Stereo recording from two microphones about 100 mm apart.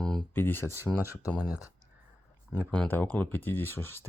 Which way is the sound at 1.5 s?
35° left (ahead or behind).